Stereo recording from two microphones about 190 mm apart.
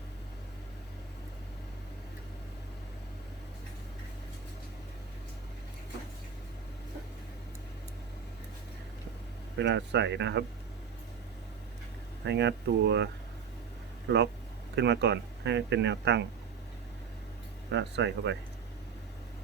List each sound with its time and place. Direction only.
9.6 s speech: 65° right (ahead or behind)
12.2 s speech: 65° right (ahead or behind)
14.8 s speech: 65° right (ahead or behind)
17.7 s speech: 65° right (ahead or behind)